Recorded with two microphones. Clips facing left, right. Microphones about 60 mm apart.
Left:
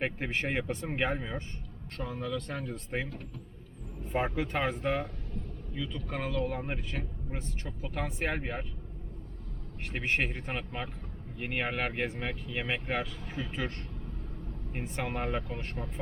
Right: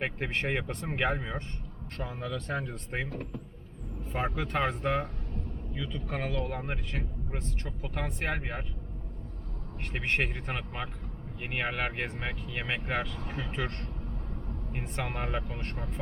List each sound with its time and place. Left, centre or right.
0.0 s speech: centre
2.0 s speech: centre
2.2 s speech: centre
4.1 s speech: centre
4.8 s speech: centre
9.9 s speech: centre